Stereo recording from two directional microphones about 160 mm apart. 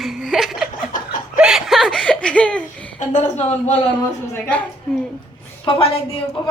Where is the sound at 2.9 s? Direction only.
50° left (ahead or behind).